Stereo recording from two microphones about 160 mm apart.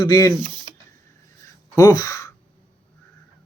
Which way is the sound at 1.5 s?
20° left (ahead or behind).